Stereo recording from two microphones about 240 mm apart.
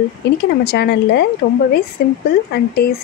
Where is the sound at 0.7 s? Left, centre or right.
Left.